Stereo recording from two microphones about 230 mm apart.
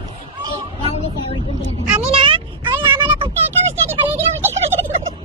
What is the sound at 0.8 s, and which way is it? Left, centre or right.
Vehicle, left.